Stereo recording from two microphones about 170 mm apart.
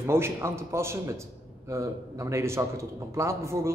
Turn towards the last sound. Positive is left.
turn(degrees=-15)  # may be behind; listen again after turning